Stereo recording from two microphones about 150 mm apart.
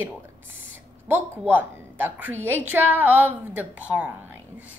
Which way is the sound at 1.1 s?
15° right (ahead or behind).